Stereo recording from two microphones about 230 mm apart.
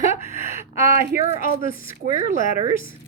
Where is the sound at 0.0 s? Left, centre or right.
Left.